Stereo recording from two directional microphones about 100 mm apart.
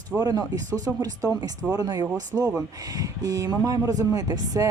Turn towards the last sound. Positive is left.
turn(degrees=-40)  # may be behind; listen again after turning